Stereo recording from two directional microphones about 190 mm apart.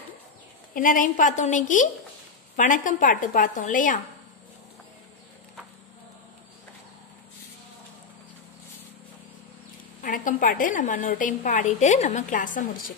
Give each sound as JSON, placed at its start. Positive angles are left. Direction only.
{"t": 0.7, "sound": "a woman's voice", "side_deg": 45}
{"t": 10.0, "sound": "a woman's voice", "side_deg": 45}